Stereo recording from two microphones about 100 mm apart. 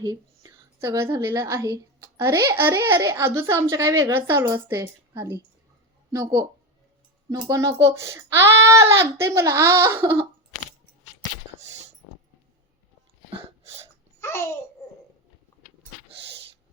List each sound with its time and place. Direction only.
0.0 s a woman's voice: 35° right (ahead or behind)
7.3 s speech: 35° right (ahead or behind)
14.2 s babbling: 25° left (ahead or behind)